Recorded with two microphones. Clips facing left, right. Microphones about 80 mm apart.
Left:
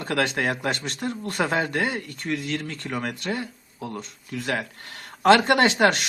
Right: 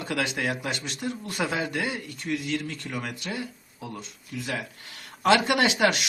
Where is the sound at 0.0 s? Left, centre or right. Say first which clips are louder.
Left 4 dB; left.